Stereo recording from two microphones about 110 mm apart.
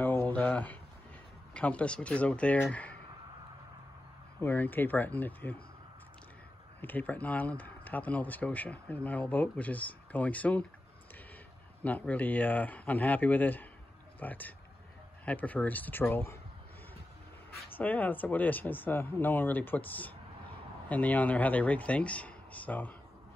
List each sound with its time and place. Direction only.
0.0 s a sound: 20° left (ahead or behind)
1.5 s speech: 10° left (ahead or behind)
4.4 s speech: 15° left (ahead or behind)
6.8 s speech: 15° left (ahead or behind)
11.8 s speech: 15° left (ahead or behind)
17.7 s speech: 15° left (ahead or behind)